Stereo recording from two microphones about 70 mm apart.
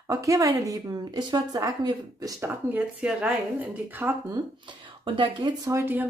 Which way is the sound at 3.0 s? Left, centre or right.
Centre.